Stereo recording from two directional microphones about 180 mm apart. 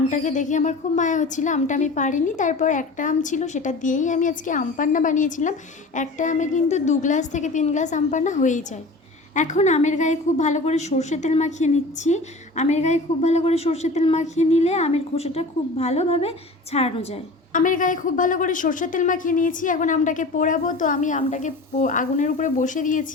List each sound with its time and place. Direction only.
0.1 s a woman's voice: 45° left (ahead or behind)